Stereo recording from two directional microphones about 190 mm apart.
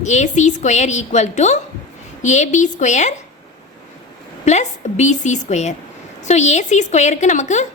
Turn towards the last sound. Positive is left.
turn(degrees=40)  # may be behind; listen again after turning